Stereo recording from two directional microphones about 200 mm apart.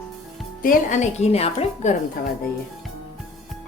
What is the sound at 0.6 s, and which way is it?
A woman's voice, 35° left (ahead or behind).